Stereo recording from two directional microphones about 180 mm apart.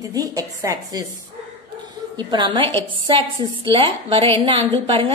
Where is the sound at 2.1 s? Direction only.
25° right (ahead or behind).